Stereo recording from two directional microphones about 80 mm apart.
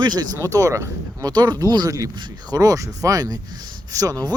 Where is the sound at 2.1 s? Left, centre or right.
Right.